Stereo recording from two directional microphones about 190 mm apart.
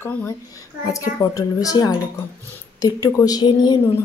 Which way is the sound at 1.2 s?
20° left (ahead or behind).